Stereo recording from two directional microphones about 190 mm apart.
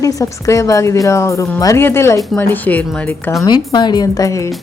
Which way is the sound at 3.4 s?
25° left (ahead or behind).